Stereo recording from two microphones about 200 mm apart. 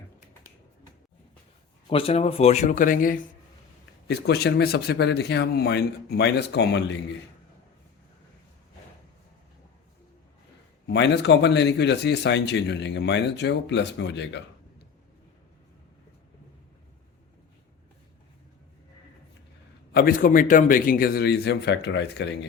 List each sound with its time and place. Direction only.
1.9 s speech: 30° left (ahead or behind); by 3.2 s 45° left (ahead or behind)
4.1 s speech: 55° left (ahead or behind)
10.8 s speech: 60° left (ahead or behind)
19.9 s a man's voice: 50° left (ahead or behind)